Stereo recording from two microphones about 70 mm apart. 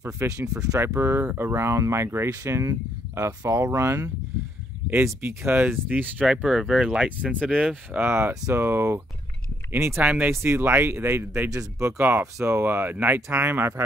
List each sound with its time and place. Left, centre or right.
0.0 s speech: right
0.7 s speech: right
2.2 s speech: right
6.2 s speech: centre
8.0 s speech: right
10.0 s speech: right
11.5 s speech: right
12.0 s speech: right